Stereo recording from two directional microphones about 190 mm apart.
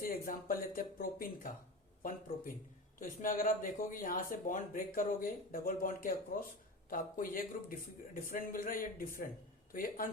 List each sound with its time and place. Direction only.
0.0 s speech: 50° left (ahead or behind)